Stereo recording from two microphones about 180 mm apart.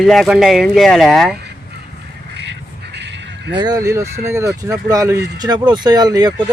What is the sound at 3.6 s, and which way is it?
Speech, 20° right (ahead or behind).